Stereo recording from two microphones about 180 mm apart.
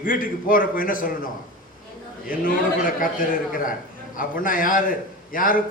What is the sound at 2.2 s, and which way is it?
A man's voice, 50° left (ahead or behind).